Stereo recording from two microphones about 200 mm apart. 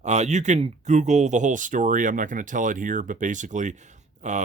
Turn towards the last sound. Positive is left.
turn(degrees=-35)  # may be behind; listen again after turning